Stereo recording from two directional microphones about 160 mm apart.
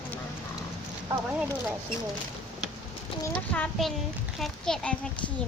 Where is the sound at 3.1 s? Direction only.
30° left (ahead or behind).